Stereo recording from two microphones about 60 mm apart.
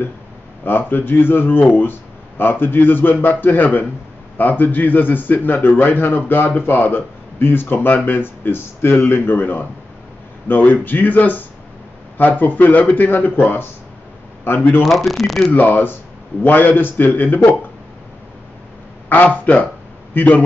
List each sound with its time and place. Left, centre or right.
0.7 s a man's voice: left
14.8 s speech: centre
15.5 s a man's voice: left
19.0 s a man's voice: left